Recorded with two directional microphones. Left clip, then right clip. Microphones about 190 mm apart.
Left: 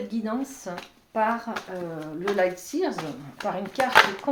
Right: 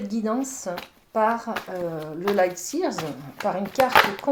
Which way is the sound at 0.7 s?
35° right (ahead or behind).